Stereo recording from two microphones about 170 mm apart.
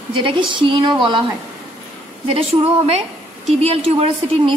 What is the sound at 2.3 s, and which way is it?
A woman's voice, 35° right (ahead or behind).